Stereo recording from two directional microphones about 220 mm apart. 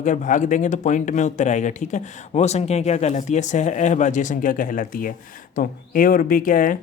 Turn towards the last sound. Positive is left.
turn(degrees=35)  # may be behind; listen again after turning